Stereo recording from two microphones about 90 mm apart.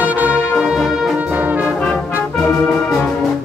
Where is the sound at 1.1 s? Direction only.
15° right (ahead or behind).